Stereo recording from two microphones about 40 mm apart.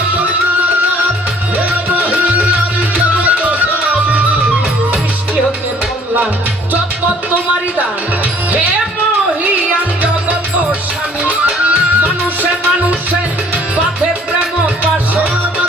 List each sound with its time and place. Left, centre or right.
1.5 s music: right
10.0 s music: right